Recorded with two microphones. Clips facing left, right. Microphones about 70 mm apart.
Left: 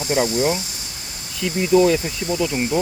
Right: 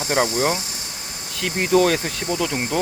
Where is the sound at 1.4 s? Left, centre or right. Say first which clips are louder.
Left 2 dB; right.